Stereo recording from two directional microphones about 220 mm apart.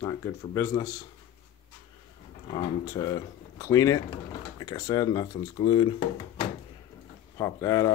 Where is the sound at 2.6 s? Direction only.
15° left (ahead or behind).